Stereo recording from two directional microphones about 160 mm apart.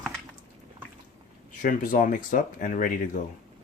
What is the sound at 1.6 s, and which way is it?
Speech, 60° left (ahead or behind).